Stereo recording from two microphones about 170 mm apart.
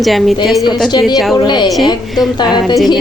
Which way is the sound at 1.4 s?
25° left (ahead or behind).